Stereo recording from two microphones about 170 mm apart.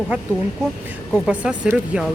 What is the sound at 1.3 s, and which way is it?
Speech, 5° right (ahead or behind).